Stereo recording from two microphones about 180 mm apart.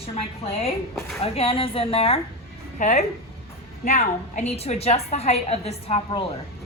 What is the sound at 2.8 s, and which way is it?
A woman's voice, 45° left (ahead or behind).